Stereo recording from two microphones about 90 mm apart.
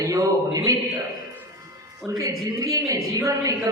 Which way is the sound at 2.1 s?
45° right (ahead or behind).